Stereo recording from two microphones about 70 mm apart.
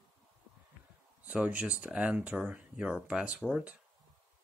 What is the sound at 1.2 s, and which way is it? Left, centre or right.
Speech, centre.